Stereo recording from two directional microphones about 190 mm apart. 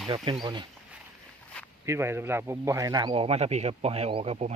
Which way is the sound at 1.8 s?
15° right (ahead or behind).